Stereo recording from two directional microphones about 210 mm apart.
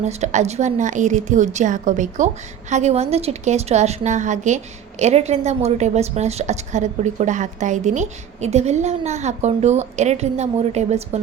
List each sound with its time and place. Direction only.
0.0 s a woman's voice: 30° right (ahead or behind)